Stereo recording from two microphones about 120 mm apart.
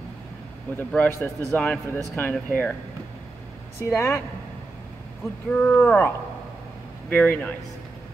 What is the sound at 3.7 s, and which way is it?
Speech, 25° left (ahead or behind).